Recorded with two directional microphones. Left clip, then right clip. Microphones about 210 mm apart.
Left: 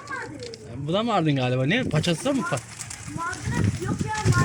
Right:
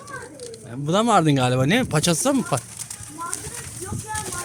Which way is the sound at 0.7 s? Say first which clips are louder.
Right 6 dB; 25° right (ahead or behind).